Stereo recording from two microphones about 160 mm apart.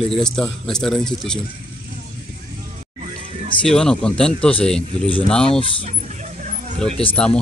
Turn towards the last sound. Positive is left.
turn(degrees=5)  # may be behind; listen again after turning